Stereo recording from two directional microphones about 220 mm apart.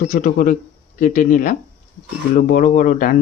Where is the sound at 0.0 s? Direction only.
35° left (ahead or behind).